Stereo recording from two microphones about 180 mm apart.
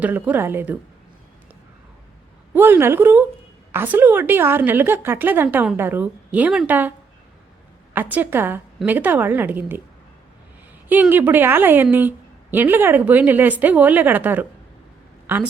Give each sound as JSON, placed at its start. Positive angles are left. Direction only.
{"t": 0.0, "sound": "a woman's voice", "side_deg": -10}
{"t": 2.5, "sound": "a woman's voice", "side_deg": -10}
{"t": 8.1, "sound": "a woman's voice", "side_deg": -10}
{"t": 10.8, "sound": "a woman's voice", "side_deg": -10}